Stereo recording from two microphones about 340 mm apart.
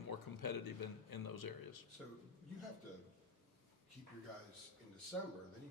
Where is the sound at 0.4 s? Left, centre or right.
Left.